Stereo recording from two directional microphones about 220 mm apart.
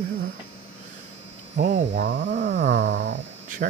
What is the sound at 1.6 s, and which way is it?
Speech, 40° right (ahead or behind).